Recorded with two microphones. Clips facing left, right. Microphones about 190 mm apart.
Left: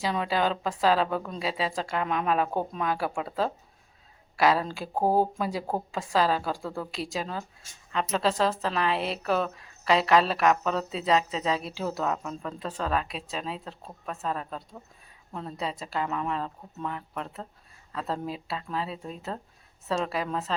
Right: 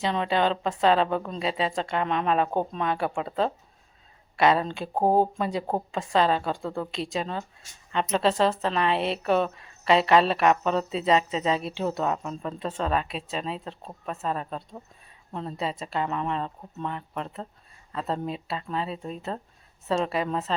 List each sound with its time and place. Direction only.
0.0 s speech: 5° left (ahead or behind)
4.9 s speech: 20° right (ahead or behind)
5.4 s speech: 5° left (ahead or behind)